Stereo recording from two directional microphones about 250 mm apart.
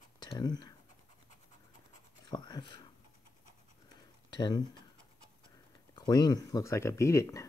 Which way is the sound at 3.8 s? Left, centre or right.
Centre.